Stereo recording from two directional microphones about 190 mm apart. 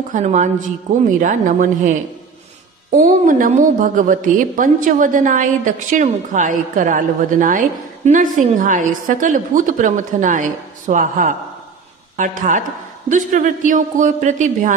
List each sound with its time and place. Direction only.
0.1 s a woman's voice: 40° right (ahead or behind)
3.0 s a woman's voice: 45° right (ahead or behind)